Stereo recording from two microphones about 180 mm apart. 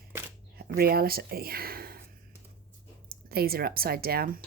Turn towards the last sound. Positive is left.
turn(degrees=-55)  # may be behind; listen again after turning